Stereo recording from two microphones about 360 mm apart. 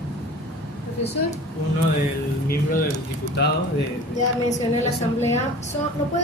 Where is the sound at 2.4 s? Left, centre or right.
Left.